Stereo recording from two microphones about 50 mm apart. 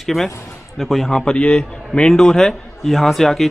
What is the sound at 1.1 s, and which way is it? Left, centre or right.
A man's voice, centre.